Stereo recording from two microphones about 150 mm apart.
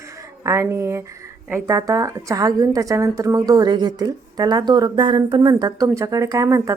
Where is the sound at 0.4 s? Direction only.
20° right (ahead or behind).